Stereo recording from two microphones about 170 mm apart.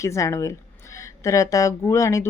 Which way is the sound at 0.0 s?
15° left (ahead or behind).